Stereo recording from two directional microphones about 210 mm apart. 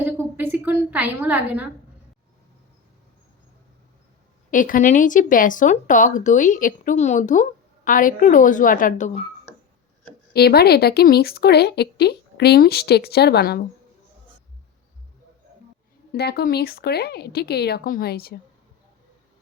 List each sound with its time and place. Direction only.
0.0 s a sound: 10° right (ahead or behind)
4.5 s a woman's voice: 40° left (ahead or behind)
10.3 s speech: 50° left (ahead or behind)
16.1 s speech: 50° left (ahead or behind)